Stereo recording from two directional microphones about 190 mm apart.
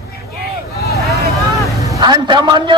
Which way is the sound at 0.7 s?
55° left (ahead or behind).